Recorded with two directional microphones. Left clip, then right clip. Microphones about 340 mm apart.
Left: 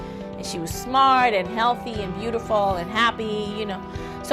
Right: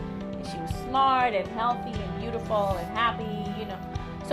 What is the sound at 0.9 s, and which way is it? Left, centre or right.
Speech, left.